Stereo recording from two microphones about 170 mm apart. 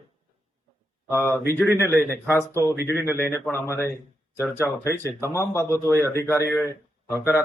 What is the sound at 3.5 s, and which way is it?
Speech, 15° left (ahead or behind).